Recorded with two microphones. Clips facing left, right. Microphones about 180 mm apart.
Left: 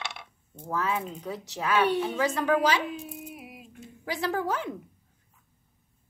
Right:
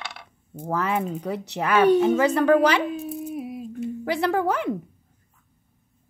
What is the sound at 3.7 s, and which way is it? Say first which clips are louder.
Speech: right 8 dB; 65° right (ahead or behind).